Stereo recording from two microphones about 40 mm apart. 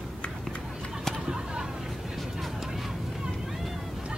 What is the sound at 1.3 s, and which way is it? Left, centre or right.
Vehicle, centre.